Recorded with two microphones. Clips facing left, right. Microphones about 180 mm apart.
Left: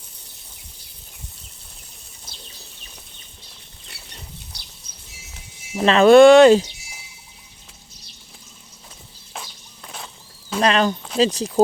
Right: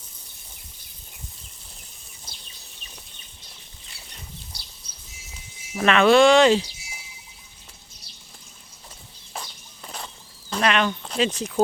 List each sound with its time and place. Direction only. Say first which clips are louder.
5.7 s speech: left 4 dB; 30° left (ahead or behind)
6.1 s speech: left 7 dB; 50° left (ahead or behind)
9.3 s a sound: even; centre (ahead or behind)
10.6 s speech: left 4 dB; 35° left (ahead or behind)